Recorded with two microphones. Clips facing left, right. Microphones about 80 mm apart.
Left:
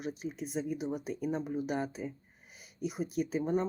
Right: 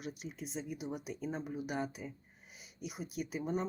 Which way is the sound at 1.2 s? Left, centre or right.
Centre.